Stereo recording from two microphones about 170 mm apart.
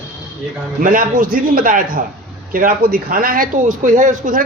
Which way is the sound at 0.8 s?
55° right (ahead or behind).